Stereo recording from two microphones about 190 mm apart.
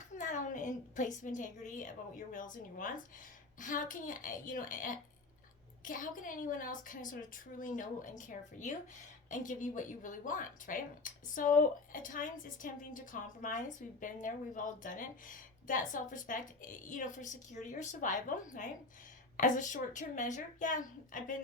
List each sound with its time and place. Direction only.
0.2 s a woman's voice: 40° left (ahead or behind)